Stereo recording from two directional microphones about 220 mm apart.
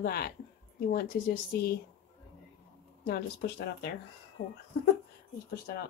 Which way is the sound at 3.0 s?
45° left (ahead or behind).